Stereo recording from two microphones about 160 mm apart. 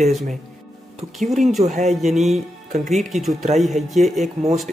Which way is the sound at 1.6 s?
50° right (ahead or behind).